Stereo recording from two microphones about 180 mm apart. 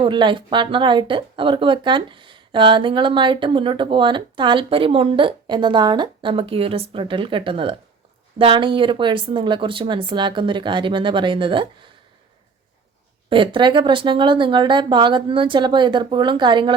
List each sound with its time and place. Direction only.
0.0 s speech: 25° right (ahead or behind)
13.3 s speech: 30° right (ahead or behind)